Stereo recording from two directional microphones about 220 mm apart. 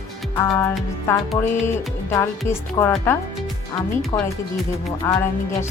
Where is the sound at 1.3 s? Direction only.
10° left (ahead or behind).